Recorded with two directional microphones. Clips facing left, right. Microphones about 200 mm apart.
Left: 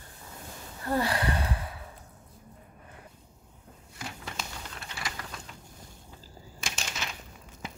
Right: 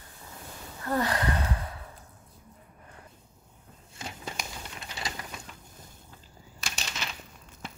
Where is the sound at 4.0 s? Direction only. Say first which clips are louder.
Right 1 dB; 25° right (ahead or behind).